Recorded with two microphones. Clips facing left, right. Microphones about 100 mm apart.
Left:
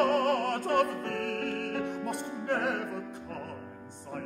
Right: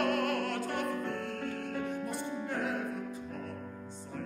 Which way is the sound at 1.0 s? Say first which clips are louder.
Left 4 dB; 75° left (ahead or behind).